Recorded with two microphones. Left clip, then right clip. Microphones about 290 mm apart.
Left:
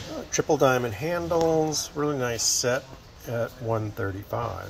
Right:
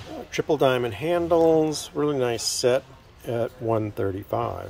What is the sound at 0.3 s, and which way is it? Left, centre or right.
Speech, centre.